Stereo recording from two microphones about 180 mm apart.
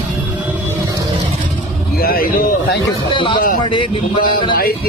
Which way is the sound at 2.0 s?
55° left (ahead or behind).